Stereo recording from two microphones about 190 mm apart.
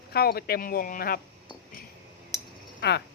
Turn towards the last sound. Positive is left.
turn(degrees=65)  # may be behind; listen again after turning